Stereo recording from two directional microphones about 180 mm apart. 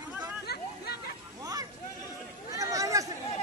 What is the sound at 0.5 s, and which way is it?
Chatter, 60° left (ahead or behind).